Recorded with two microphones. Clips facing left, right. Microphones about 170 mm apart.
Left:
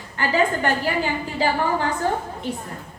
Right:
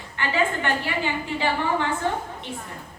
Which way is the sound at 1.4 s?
40° left (ahead or behind).